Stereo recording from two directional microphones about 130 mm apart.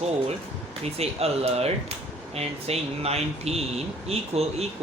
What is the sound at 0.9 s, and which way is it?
Speech, 50° right (ahead or behind).